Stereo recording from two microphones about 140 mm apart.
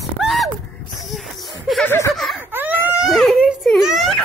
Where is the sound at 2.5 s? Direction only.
15° right (ahead or behind).